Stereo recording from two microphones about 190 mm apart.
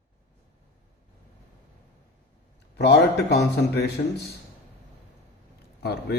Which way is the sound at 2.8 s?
60° left (ahead or behind).